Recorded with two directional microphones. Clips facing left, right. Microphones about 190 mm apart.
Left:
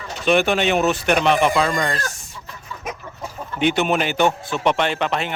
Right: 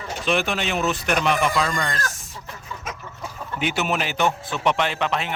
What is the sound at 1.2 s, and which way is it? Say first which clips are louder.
Speech: left 4 dB; 30° left (ahead or behind).